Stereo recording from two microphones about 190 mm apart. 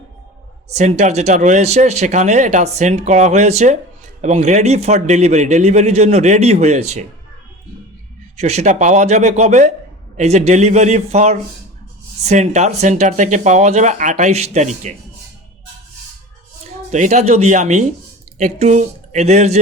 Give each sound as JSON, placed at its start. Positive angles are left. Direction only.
{"t": 0.7, "sound": "speech", "side_deg": -35}
{"t": 8.4, "sound": "speech", "side_deg": -35}
{"t": 16.9, "sound": "speech", "side_deg": -40}